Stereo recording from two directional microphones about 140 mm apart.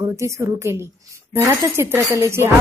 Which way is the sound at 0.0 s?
20° right (ahead or behind).